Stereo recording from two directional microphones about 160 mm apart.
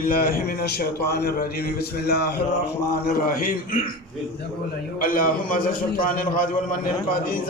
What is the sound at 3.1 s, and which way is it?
Music, 60° left (ahead or behind).